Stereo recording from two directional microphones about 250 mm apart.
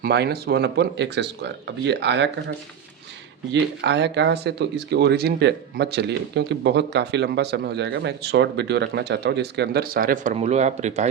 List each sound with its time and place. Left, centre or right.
0.0 s speech: right
3.5 s speech: right